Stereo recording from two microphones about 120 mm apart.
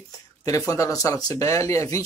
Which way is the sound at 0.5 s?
25° left (ahead or behind).